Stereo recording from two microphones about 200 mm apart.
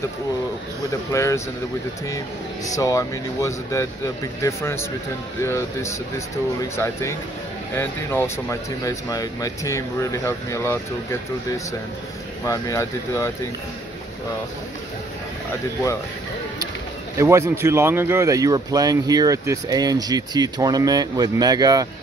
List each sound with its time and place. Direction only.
1.1 s speech: 15° left (ahead or behind)
17.2 s speech: 15° right (ahead or behind)